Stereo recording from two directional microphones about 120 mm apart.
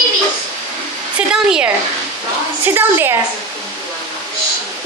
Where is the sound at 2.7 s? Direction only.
20° right (ahead or behind).